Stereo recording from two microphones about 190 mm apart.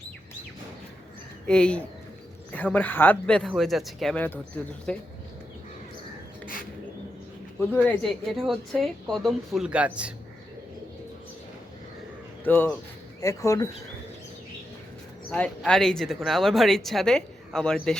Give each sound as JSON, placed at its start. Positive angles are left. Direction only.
{"t": 1.5, "sound": "speech", "side_deg": 5}
{"t": 7.7, "sound": "speech", "side_deg": 10}
{"t": 12.5, "sound": "speech", "side_deg": 10}
{"t": 15.3, "sound": "speech", "side_deg": 5}